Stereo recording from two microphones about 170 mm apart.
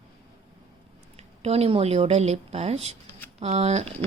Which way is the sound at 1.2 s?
35° right (ahead or behind).